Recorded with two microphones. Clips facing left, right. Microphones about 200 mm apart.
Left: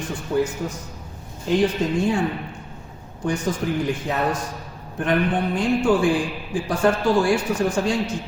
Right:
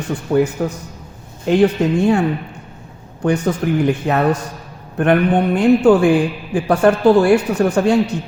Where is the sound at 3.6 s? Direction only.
70° right (ahead or behind).